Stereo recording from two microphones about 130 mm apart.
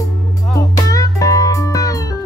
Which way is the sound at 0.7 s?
25° left (ahead or behind).